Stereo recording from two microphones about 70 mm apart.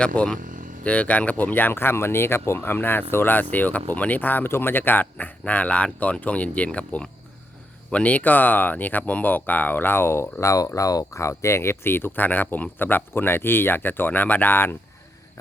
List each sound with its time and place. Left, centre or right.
0.0 s speech: centre; by 2.6 s left
2.6 s speech: left
10.4 s speech: left